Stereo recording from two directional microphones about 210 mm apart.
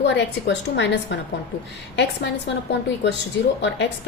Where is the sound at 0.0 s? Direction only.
55° left (ahead or behind).